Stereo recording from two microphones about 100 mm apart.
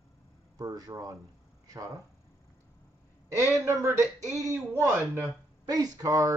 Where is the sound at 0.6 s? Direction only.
40° right (ahead or behind).